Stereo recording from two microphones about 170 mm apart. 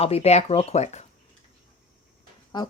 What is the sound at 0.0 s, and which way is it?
Speech, 35° left (ahead or behind).